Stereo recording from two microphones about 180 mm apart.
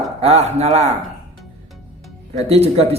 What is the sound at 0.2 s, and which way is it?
Speech, 35° right (ahead or behind).